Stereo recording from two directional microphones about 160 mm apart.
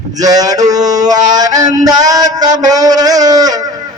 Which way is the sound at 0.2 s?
20° right (ahead or behind).